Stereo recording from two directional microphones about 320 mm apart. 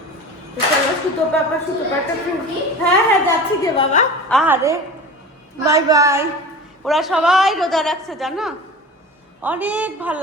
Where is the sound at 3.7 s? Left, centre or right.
Left.